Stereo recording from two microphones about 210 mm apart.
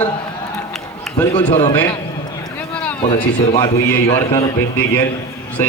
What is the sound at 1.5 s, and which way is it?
Speech, 35° left (ahead or behind).